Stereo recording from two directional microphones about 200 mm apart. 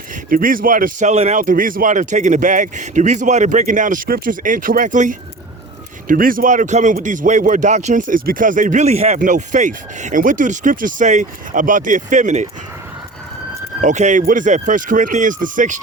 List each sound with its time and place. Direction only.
0.3 s speech: 45° right (ahead or behind)
13.8 s speech: 35° right (ahead or behind)